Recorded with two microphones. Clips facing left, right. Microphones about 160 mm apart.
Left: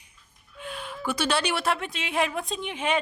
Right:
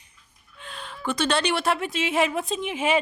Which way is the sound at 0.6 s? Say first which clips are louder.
Left 1 dB; 10° left (ahead or behind).